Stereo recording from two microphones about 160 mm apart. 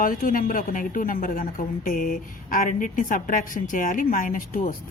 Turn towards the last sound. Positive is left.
turn(degrees=55)  # may be behind; listen again after turning